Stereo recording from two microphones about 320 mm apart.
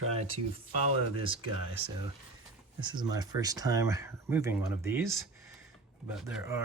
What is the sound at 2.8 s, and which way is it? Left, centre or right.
Speech, centre.